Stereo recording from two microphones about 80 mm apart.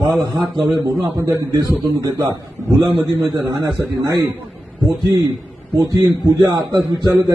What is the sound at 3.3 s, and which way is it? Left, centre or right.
Speech, right.